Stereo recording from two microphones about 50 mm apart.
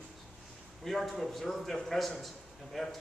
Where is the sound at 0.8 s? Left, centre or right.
Centre.